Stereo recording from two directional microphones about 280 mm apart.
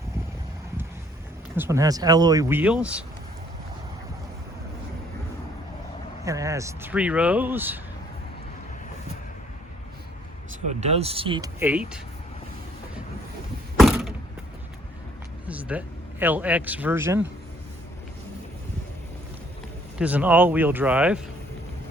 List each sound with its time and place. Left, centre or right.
1.5 s speech: centre
6.2 s speech: centre
10.7 s speech: right
13.7 s mechanisms: centre
15.4 s speech: centre
20.0 s speech: centre